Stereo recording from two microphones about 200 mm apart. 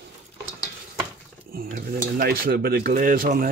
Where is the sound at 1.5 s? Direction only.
45° right (ahead or behind).